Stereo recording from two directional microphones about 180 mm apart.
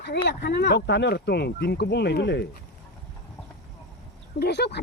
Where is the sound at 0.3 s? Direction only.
65° left (ahead or behind).